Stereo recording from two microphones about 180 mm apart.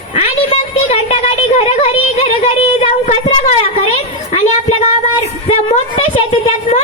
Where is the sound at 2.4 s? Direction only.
35° left (ahead or behind).